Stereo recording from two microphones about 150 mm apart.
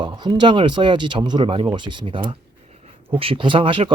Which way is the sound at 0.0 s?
30° right (ahead or behind).